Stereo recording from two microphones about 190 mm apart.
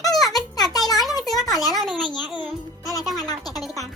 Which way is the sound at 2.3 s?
20° left (ahead or behind).